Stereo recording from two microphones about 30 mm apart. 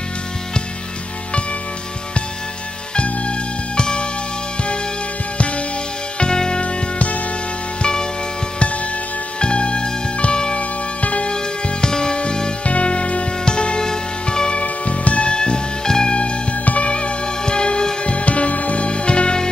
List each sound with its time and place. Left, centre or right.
3.0 s music: left
6.1 s music: left
6.6 s music: left
7.8 s music: left
9.4 s music: left
11.0 s music: left
11.8 s music: left
12.6 s music: left
14.5 s music: left
15.3 s music: left
16.6 s music: left
18.1 s music: left
18.9 s music: left